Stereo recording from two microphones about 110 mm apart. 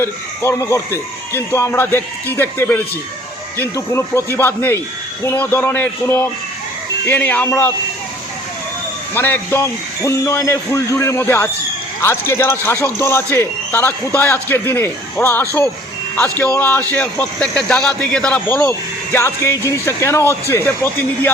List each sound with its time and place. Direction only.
0.0 s a man's voice: 25° left (ahead or behind)
9.1 s a man's voice: 20° left (ahead or behind)